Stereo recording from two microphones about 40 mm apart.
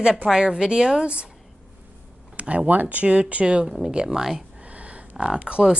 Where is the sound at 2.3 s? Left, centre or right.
Right.